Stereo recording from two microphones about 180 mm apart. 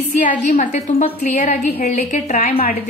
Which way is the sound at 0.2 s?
45° left (ahead or behind).